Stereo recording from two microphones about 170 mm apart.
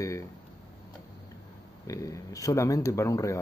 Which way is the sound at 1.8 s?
20° left (ahead or behind).